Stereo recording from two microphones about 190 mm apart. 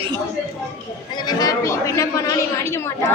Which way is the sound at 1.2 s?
20° left (ahead or behind).